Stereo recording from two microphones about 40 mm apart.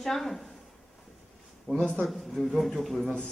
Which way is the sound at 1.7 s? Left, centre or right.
Left.